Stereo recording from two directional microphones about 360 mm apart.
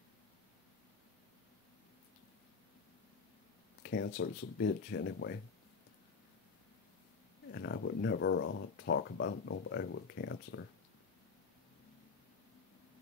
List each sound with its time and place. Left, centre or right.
3.8 s speech: left
7.5 s speech: left